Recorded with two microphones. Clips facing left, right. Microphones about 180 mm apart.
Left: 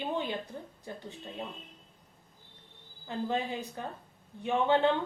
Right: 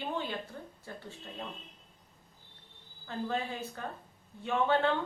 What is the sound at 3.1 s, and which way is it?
A woman's voice, 15° left (ahead or behind).